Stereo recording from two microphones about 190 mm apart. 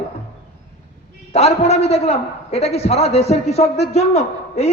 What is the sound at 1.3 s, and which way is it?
A man's voice, 35° left (ahead or behind).